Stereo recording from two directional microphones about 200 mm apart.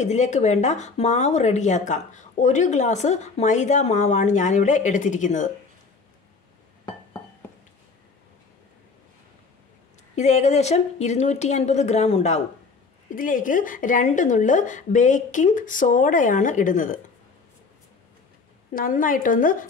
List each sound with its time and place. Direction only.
0.0 s speech: 35° left (ahead or behind)
10.1 s speech: 35° left (ahead or behind)
18.7 s a woman's voice: 45° left (ahead or behind)